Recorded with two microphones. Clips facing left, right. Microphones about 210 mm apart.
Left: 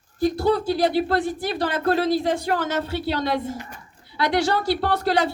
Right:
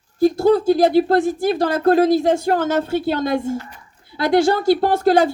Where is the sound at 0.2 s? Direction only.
45° right (ahead or behind).